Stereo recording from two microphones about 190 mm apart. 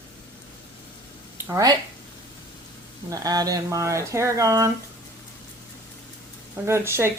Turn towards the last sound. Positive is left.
turn(degrees=-15)  # may be behind; listen again after turning